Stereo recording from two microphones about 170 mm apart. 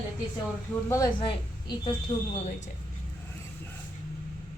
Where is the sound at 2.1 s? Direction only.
25° left (ahead or behind).